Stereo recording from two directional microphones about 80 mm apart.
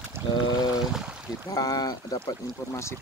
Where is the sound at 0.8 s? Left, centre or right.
Centre.